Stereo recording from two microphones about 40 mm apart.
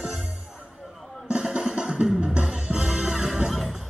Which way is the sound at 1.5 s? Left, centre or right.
Right.